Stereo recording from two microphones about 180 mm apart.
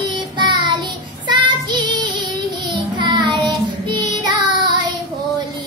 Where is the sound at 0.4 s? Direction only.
25° right (ahead or behind).